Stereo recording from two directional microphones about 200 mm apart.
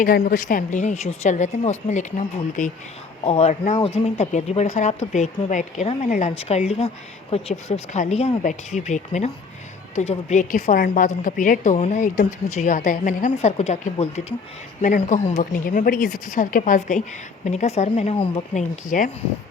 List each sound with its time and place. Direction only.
0.0 s speech: 45° left (ahead or behind)